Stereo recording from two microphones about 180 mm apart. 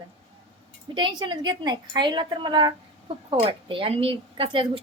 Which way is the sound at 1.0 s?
25° right (ahead or behind).